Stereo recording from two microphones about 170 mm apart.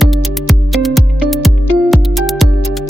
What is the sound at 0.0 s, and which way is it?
Music, centre (ahead or behind).